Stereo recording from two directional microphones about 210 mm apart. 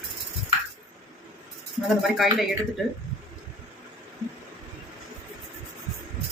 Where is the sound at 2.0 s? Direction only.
Centre (ahead or behind).